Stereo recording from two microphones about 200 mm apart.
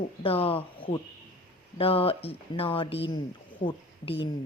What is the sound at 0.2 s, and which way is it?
A woman's voice, 30° left (ahead or behind).